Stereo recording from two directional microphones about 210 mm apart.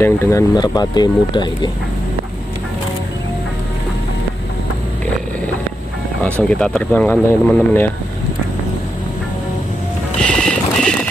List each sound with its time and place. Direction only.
0.0 s speech: 10° left (ahead or behind)
6.2 s speech: 5° left (ahead or behind)
10.2 s clip-clop: 5° left (ahead or behind)